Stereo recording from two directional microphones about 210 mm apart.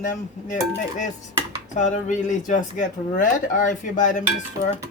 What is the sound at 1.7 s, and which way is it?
Speech, 35° left (ahead or behind).